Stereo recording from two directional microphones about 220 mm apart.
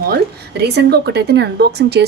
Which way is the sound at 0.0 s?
45° right (ahead or behind).